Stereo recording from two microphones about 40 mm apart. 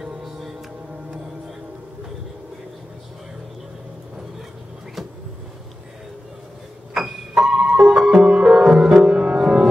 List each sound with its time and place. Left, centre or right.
6.9 s music: centre